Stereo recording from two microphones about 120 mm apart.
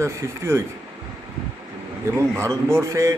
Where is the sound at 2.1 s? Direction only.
25° right (ahead or behind).